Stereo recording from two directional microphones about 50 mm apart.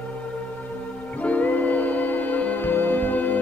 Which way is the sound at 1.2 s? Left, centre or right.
Left.